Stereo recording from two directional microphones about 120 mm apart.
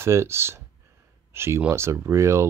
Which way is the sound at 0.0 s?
20° right (ahead or behind).